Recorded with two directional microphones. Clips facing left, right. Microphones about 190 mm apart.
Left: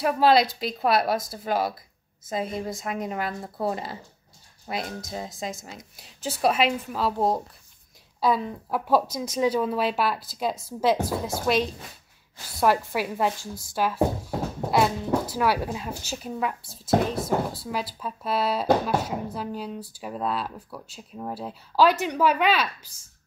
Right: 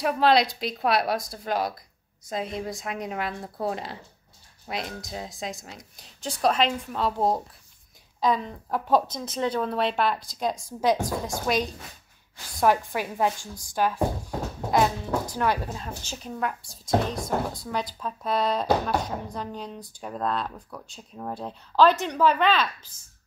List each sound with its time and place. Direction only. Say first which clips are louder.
0.0 s a woman's voice: left 1 dB; centre (ahead or behind)
15.3 s speech: left 2 dB; 10° left (ahead or behind)